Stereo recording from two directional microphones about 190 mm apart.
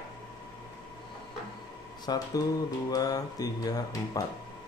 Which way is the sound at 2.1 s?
20° left (ahead or behind).